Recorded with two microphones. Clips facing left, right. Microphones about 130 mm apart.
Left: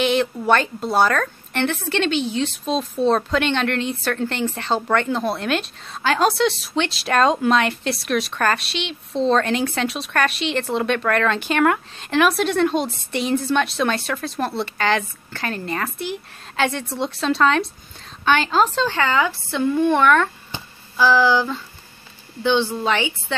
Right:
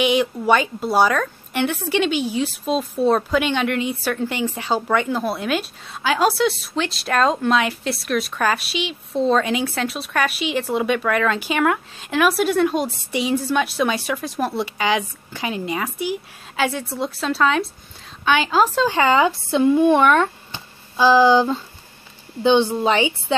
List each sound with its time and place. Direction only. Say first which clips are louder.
0.0 s a woman's voice: right 1 dB; 10° right (ahead or behind)